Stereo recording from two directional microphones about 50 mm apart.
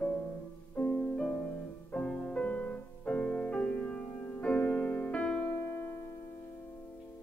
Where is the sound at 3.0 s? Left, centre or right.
Centre.